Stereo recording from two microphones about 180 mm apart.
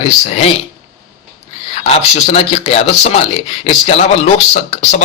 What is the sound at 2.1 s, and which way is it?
Speech, 35° left (ahead or behind).